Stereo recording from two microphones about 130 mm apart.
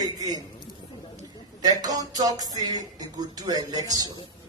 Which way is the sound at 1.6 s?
30° right (ahead or behind).